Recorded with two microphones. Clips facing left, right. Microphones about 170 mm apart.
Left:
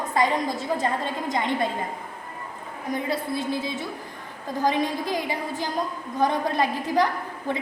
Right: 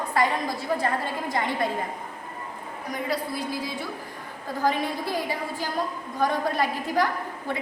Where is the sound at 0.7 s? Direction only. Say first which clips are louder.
Left 1 dB; 20° left (ahead or behind).